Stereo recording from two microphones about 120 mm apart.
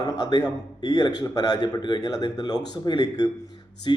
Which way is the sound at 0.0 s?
35° left (ahead or behind).